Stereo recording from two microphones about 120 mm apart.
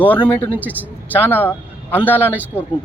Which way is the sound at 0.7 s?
15° right (ahead or behind).